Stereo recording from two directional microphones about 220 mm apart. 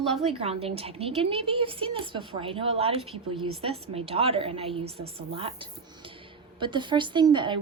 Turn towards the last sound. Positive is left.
turn(degrees=-20)  # may be behind; listen again after turning